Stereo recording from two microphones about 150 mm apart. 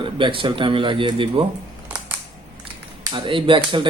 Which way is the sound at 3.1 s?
35° right (ahead or behind).